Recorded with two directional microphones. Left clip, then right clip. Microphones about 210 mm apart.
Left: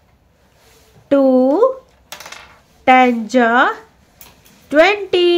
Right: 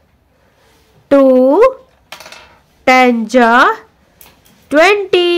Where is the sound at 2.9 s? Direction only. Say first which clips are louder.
Right 2 dB; 30° right (ahead or behind).